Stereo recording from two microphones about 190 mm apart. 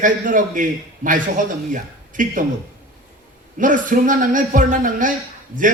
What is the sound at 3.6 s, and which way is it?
A man's voice, 45° right (ahead or behind).